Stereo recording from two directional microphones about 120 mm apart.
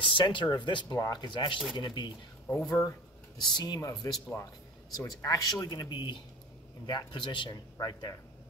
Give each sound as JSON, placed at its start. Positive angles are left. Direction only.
{"t": 0.0, "sound": "speech", "side_deg": 45}
{"t": 2.4, "sound": "speech", "side_deg": 10}
{"t": 3.3, "sound": "speech", "side_deg": 35}